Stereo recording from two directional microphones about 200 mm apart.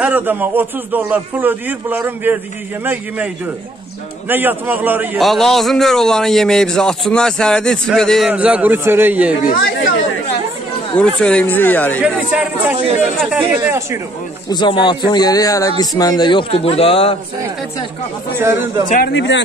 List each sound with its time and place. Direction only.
0.0 s a man's voice: 10° right (ahead or behind)
4.3 s a man's voice: 10° right (ahead or behind)
9.4 s speech: 45° left (ahead or behind)
11.0 s speech: 5° left (ahead or behind)
12.0 s a man's voice: 5° right (ahead or behind)
14.5 s speech: 25° left (ahead or behind)
18.4 s a man's voice: 15° right (ahead or behind)
19.1 s speech: 65° left (ahead or behind)